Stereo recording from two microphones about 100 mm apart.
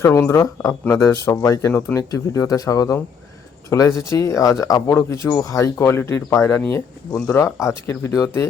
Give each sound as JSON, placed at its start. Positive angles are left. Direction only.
{"t": 0.0, "sound": "speech", "side_deg": 30}